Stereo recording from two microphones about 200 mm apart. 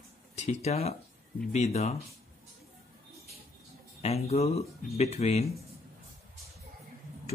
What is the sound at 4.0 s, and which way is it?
Speech, 30° left (ahead or behind).